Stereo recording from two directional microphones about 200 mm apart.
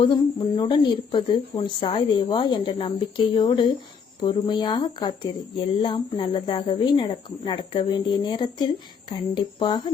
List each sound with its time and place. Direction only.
0.0 s a woman's voice: 20° left (ahead or behind)